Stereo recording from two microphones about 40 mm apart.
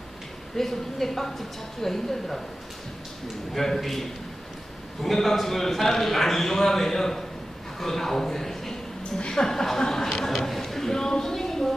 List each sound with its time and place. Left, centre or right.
0.5 s speech: centre
3.5 s a man's voice: centre